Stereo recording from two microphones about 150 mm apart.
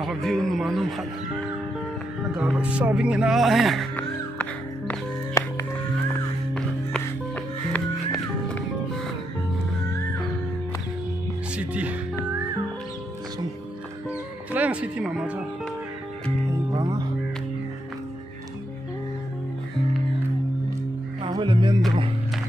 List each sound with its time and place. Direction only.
0.0 s speech: centre (ahead or behind)
2.3 s speech: 5° right (ahead or behind)
3.9 s music: 10° left (ahead or behind)
5.4 s music: 20° left (ahead or behind)
7.7 s music: 5° left (ahead or behind)
11.5 s music: 10° right (ahead or behind)
14.5 s speech: 10° right (ahead or behind)
16.7 s music: 25° right (ahead or behind)
21.3 s music: 30° right (ahead or behind)